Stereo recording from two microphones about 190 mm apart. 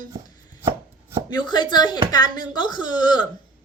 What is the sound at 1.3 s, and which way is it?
Speech, 25° left (ahead or behind).